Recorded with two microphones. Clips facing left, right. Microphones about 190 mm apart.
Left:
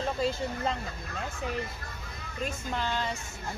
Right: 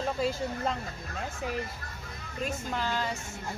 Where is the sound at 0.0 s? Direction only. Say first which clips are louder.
Even; 5° right (ahead or behind).